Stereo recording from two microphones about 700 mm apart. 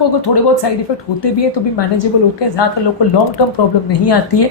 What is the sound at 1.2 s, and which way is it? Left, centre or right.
A woman's voice, left.